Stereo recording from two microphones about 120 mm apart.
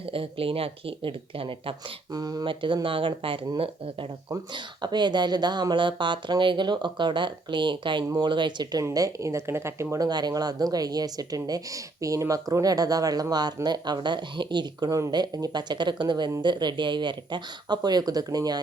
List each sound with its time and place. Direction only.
0.1 s speech: 50° right (ahead or behind)
2.1 s speech: 35° right (ahead or behind)
2.5 s speech: 45° right (ahead or behind)
4.5 s speech: 40° right (ahead or behind)
8.8 s speech: 30° right (ahead or behind)